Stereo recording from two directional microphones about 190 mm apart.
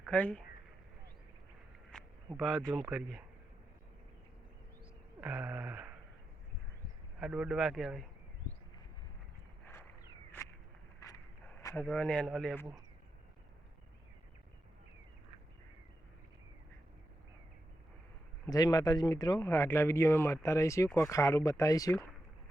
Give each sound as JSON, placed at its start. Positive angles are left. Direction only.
{"t": 0.0, "sound": "speech", "side_deg": 5}
{"t": 1.9, "sound": "a sound", "side_deg": 5}
{"t": 2.4, "sound": "speech", "side_deg": 0}
{"t": 5.2, "sound": "speech", "side_deg": -10}
{"t": 7.2, "sound": "speech", "side_deg": -5}
{"t": 9.6, "sound": "walk", "side_deg": 10}
{"t": 11.0, "sound": "a sound", "side_deg": 15}
{"t": 11.6, "sound": "speech", "side_deg": 10}
{"t": 18.4, "sound": "speech", "side_deg": 20}